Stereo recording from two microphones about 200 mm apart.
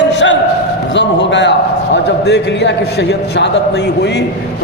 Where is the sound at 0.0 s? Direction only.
60° left (ahead or behind).